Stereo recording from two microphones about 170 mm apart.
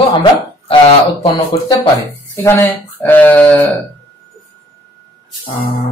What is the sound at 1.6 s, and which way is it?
Speech, 20° left (ahead or behind).